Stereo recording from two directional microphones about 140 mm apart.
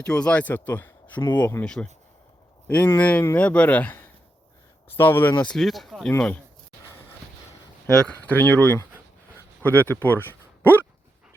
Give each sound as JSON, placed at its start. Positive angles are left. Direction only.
{"t": 0.0, "sound": "a man's voice", "side_deg": 5}
{"t": 5.4, "sound": "a man's voice", "side_deg": 5}
{"t": 7.9, "sound": "a man's voice", "side_deg": 10}